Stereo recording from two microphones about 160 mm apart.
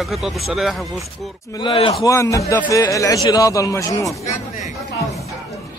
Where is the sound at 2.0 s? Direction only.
20° left (ahead or behind).